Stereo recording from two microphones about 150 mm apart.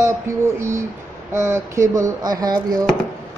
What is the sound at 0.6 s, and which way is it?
Speech, 20° right (ahead or behind).